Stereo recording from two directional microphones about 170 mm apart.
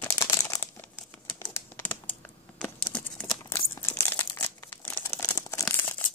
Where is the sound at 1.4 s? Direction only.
15° left (ahead or behind).